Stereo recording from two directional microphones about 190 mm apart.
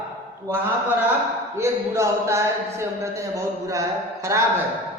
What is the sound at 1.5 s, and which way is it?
Speech, 15° right (ahead or behind).